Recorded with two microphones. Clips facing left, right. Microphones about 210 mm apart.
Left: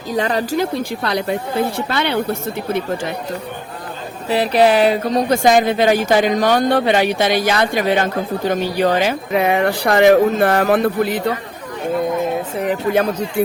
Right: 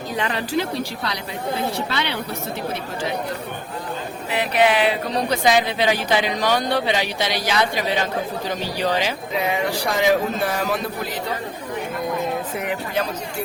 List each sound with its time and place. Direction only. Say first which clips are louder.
0.2 s speech: left 5 dB; 40° left (ahead or behind)
4.3 s speech: left 6 dB; 35° left (ahead or behind); by 11.1 s 60° left (ahead or behind)
12.9 s speech: left 8 dB; 55° left (ahead or behind)